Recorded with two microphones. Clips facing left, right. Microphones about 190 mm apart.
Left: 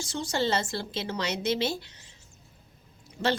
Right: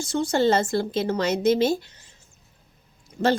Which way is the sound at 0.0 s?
55° right (ahead or behind).